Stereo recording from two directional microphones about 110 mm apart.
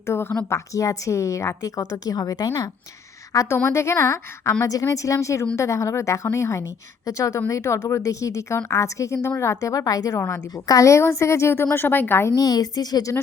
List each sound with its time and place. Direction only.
0.0 s a woman's voice: 20° left (ahead or behind); by 2.6 s 35° left (ahead or behind)
3.3 s a woman's voice: 25° left (ahead or behind)
12.4 s a woman's voice: 35° left (ahead or behind)